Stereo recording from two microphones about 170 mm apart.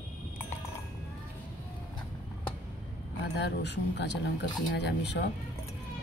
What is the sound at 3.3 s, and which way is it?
Speech, 90° left.